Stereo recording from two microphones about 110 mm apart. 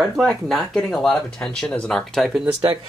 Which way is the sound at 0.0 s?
Centre (ahead or behind).